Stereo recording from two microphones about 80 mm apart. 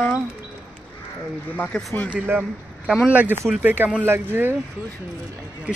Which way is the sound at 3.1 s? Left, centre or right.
Centre.